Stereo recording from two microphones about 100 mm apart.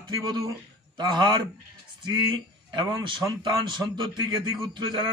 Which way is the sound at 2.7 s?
50° right (ahead or behind).